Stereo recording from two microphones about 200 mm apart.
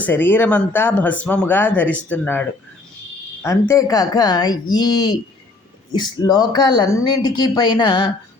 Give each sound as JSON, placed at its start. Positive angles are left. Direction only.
{"t": 0.0, "sound": "speech", "side_deg": 10}